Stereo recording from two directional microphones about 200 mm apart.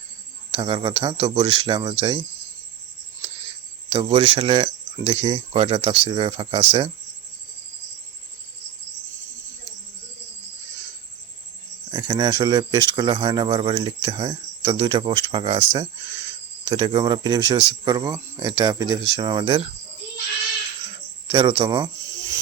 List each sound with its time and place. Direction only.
0.5 s speech: 25° right (ahead or behind)
3.8 s speech: 25° right (ahead or behind)
11.9 s speech: 20° right (ahead or behind)
21.2 s speech: 25° right (ahead or behind)